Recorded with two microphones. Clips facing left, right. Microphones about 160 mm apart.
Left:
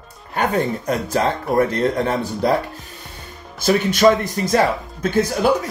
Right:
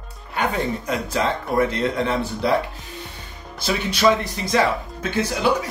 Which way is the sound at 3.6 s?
50° left (ahead or behind).